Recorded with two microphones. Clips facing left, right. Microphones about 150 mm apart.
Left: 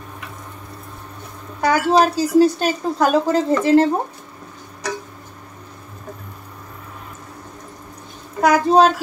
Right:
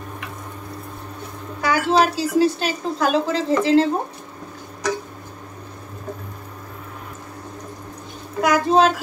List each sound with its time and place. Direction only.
1.6 s speech: 45° left (ahead or behind)
8.4 s a child's voice: 40° left (ahead or behind)